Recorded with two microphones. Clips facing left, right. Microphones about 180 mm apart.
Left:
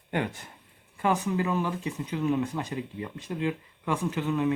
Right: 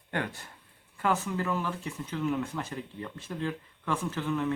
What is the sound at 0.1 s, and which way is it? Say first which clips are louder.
Speech: left 4 dB; 15° left (ahead or behind).